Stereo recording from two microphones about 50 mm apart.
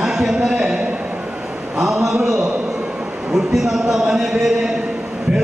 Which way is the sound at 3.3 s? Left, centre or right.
Centre.